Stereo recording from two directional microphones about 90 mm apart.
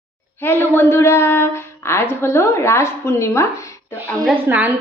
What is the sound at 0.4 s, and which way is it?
A woman's voice, 25° left (ahead or behind).